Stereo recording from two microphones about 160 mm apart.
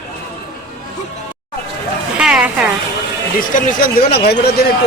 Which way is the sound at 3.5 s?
65° left (ahead or behind).